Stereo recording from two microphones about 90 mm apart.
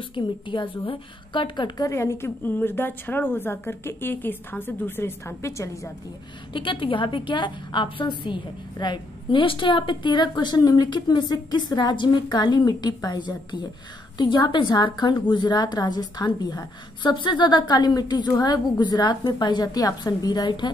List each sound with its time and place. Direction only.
0.1 s a woman's voice: 65° left (ahead or behind)
1.9 s a woman's voice: 30° left (ahead or behind)
6.5 s a woman's voice: 65° left (ahead or behind)
8.7 s a woman's voice: 55° left (ahead or behind)